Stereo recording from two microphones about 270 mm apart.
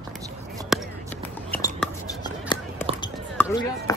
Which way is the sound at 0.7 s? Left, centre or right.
Centre.